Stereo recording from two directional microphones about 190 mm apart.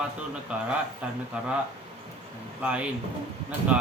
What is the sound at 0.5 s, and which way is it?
Speech, 5° right (ahead or behind).